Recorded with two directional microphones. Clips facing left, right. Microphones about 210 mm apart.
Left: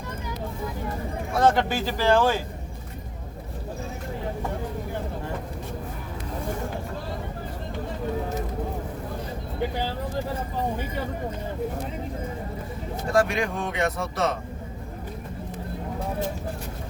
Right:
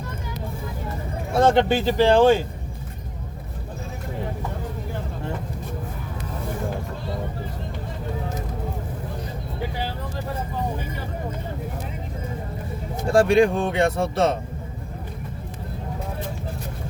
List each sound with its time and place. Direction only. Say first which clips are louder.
1.3 s speech: right 4 dB; 25° right (ahead or behind)
13.1 s speech: right 7 dB; 30° right (ahead or behind)